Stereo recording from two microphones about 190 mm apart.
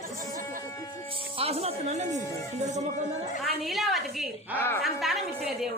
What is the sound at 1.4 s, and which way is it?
Speech, 35° right (ahead or behind).